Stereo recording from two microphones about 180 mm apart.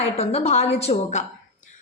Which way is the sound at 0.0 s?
35° left (ahead or behind).